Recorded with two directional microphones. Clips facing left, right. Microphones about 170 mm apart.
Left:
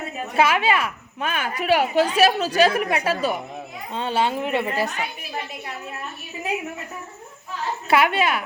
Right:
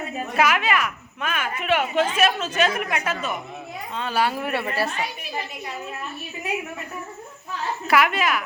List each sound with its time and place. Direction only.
0.3 s a woman's voice: 30° left (ahead or behind)
7.9 s speech: 30° left (ahead or behind)